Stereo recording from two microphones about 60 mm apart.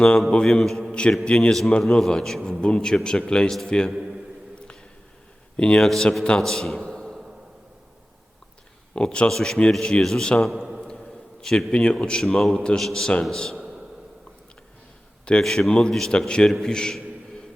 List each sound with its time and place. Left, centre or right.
0.3 s a man's voice: centre
1.2 s a man's voice: centre
4.5 s a sound: centre
5.5 s a man's voice: centre
5.8 s a man's voice: centre
8.9 s a man's voice: centre
10.5 s a man's voice: centre
10.8 s a sound: centre
11.7 s a man's voice: centre
12.2 s a man's voice: centre
13.6 s a sound: centre
15.2 s a sound: centre
15.4 s a man's voice: centre